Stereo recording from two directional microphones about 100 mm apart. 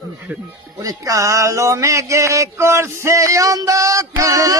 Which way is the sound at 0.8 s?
35° right (ahead or behind).